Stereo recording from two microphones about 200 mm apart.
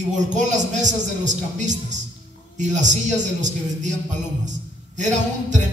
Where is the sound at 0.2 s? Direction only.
35° right (ahead or behind).